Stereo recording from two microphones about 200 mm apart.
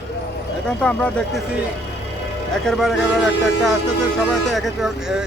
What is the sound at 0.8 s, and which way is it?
Speech, 5° left (ahead or behind).